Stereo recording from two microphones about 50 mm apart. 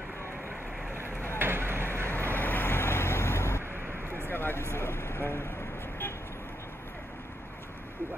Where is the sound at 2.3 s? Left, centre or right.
Left.